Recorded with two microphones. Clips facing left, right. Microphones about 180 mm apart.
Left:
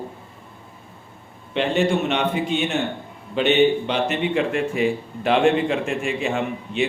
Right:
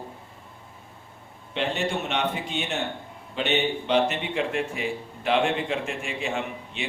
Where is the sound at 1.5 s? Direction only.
70° left (ahead or behind).